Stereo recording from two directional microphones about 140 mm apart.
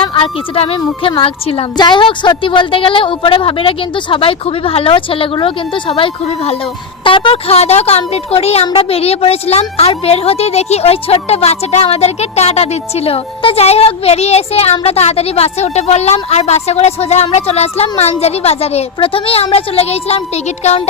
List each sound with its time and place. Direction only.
0.1 s a woman's voice: 40° left (ahead or behind)
1.7 s a woman's voice: 30° left (ahead or behind); by 20.8 s 50° left (ahead or behind)